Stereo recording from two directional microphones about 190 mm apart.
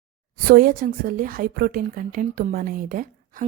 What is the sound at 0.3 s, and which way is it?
Speech, 50° right (ahead or behind).